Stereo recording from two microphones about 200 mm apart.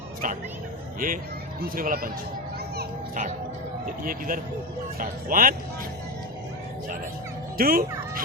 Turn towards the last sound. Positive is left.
turn(degrees=-45)  # may be behind; listen again after turning